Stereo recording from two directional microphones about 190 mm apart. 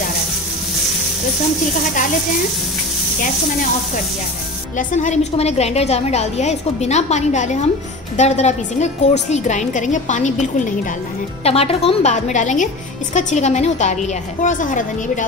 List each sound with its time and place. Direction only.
4.7 s a woman's voice: 40° left (ahead or behind)